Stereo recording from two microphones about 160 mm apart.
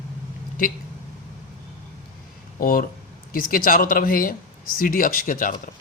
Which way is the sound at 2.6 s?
65° left (ahead or behind).